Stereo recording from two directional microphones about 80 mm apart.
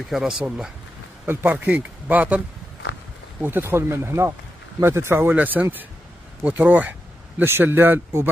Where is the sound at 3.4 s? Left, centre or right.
Right.